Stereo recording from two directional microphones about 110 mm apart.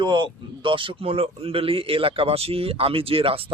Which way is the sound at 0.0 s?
45° right (ahead or behind).